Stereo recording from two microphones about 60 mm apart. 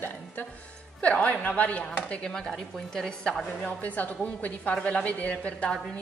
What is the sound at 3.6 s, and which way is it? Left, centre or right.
A woman's voice, left.